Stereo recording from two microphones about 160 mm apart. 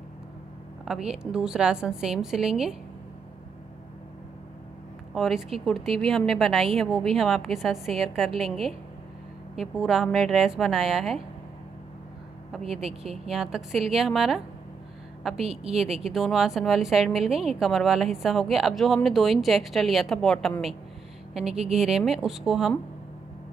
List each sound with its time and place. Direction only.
0.8 s a woman's voice: 5° right (ahead or behind)
5.1 s a woman's voice: centre (ahead or behind)
13.2 s a woman's voice: centre (ahead or behind)
15.3 s a woman's voice: 40° right (ahead or behind)
15.7 s a woman's voice: 5° right (ahead or behind)